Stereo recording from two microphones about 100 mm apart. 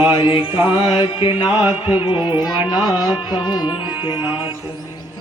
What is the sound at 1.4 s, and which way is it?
Speech, 50° left (ahead or behind).